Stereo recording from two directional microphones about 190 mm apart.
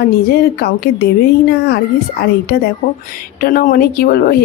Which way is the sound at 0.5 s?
55° left (ahead or behind).